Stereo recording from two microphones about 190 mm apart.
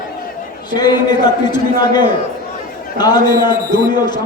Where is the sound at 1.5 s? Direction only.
20° left (ahead or behind).